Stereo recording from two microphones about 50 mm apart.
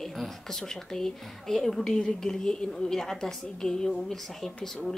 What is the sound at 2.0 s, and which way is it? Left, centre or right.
A woman's voice, centre.